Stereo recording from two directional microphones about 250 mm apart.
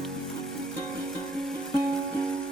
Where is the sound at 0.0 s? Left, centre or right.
Centre.